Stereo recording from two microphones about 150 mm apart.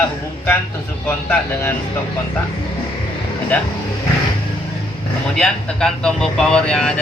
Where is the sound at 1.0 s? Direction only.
15° left (ahead or behind).